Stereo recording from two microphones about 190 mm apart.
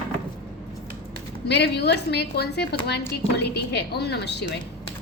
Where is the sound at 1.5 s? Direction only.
60° left (ahead or behind).